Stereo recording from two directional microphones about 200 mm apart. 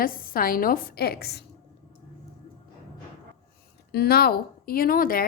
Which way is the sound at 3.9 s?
50° left (ahead or behind).